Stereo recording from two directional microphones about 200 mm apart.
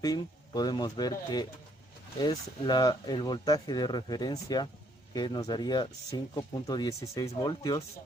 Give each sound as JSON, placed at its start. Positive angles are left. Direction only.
{"t": 0.0, "sound": "speech", "side_deg": 20}